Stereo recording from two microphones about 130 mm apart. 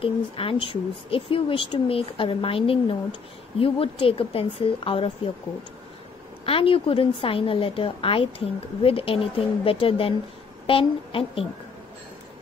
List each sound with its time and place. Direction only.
0.0 s speech: 45° left (ahead or behind)
6.4 s speech: 45° left (ahead or behind)